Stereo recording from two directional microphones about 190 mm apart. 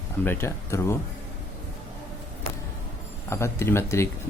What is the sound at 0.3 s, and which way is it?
Speech, 15° left (ahead or behind).